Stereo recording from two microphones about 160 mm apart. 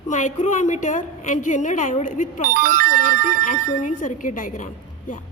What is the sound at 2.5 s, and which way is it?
Speech, 65° right (ahead or behind).